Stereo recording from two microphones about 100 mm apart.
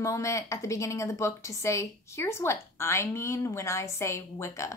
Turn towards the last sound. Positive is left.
turn(degrees=30)  # may be behind; listen again after turning